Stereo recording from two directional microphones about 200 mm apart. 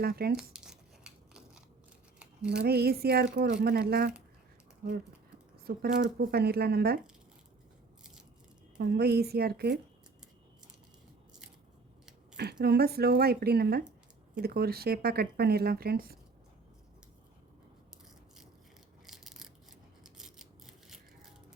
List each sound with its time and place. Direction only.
0.0 s speech: 50° right (ahead or behind)
0.3 s a sound: 5° right (ahead or behind)
2.6 s speech: 50° right (ahead or behind)
5.6 s speech: 50° right (ahead or behind)
8.8 s speech: 55° right (ahead or behind)
12.4 s speech: 55° right (ahead or behind)
19.0 s a sound: centre (ahead or behind)